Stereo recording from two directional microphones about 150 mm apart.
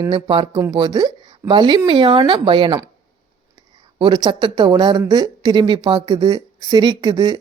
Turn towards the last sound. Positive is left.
turn(degrees=-25)  # may be behind; listen again after turning